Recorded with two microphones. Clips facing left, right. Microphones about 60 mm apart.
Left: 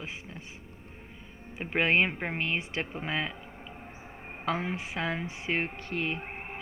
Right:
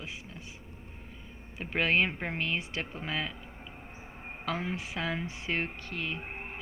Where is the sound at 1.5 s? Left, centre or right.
Left.